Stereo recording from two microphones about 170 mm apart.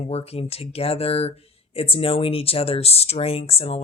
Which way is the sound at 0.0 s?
35° left (ahead or behind).